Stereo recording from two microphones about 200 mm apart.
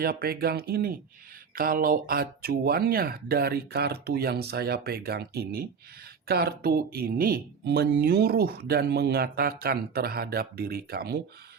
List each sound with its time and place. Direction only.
0.0 s speech: 50° right (ahead or behind)